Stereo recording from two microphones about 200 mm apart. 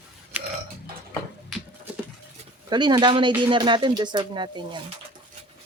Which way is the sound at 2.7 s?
20° right (ahead or behind).